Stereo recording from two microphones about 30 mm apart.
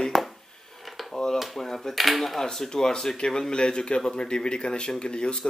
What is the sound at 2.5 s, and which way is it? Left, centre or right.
A man's voice, centre.